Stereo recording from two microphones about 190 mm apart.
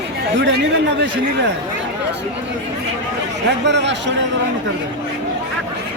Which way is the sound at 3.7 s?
65° right (ahead or behind).